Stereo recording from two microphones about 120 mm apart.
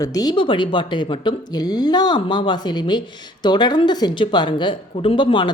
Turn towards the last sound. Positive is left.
turn(degrees=40)  # may be behind; listen again after turning